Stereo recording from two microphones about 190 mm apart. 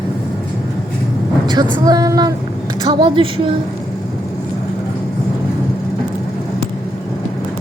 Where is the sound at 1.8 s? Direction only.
20° right (ahead or behind).